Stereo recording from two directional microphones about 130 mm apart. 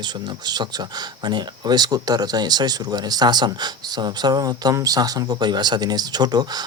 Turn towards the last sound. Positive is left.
turn(degrees=-30)  # may be behind; listen again after turning